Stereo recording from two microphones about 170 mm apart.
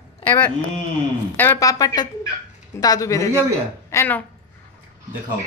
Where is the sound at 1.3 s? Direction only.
10° left (ahead or behind).